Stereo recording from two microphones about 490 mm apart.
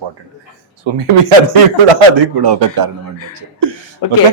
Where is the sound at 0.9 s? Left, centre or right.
Right.